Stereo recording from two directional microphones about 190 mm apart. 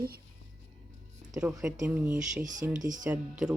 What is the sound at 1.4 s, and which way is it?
Speech, 10° right (ahead or behind).